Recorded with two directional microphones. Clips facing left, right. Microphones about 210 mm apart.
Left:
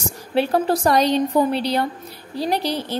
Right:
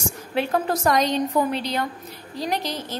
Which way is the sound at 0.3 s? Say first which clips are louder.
Left 4 dB; 30° left (ahead or behind).